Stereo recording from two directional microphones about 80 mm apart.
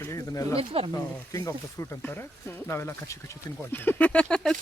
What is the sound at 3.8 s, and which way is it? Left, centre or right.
Speech, centre.